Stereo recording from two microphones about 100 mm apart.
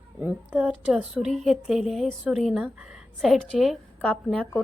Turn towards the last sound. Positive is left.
turn(degrees=15)  # may be behind; listen again after turning